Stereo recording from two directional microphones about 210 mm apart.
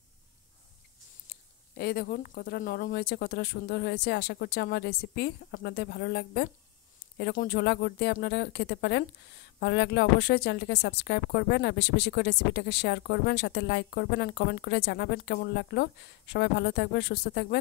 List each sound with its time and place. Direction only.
1.8 s speech: 50° left (ahead or behind)